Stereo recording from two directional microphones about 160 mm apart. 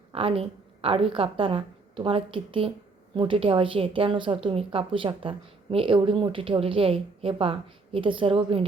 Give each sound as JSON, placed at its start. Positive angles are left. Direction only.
{"t": 0.1, "sound": "a woman's voice", "side_deg": -35}